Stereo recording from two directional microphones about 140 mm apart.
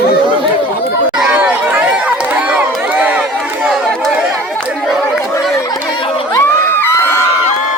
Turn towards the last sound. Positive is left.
turn(degrees=15)  # may be behind; listen again after turning